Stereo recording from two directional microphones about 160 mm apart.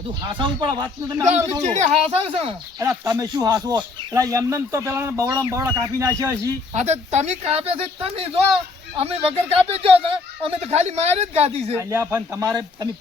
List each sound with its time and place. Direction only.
0.3 s speech: 30° right (ahead or behind)
2.0 s speech: 35° right (ahead or behind)
2.7 s speech: 20° right (ahead or behind)
6.7 s speech: 45° right (ahead or behind)
11.7 s a man's voice: 15° right (ahead or behind)